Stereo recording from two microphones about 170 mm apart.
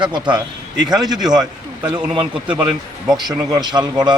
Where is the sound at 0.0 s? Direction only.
25° right (ahead or behind).